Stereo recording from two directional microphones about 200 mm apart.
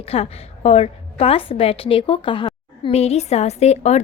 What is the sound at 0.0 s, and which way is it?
A woman's voice, 30° left (ahead or behind).